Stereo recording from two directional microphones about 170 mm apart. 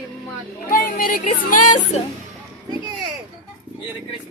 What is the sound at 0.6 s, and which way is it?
Speech, 55° left (ahead or behind).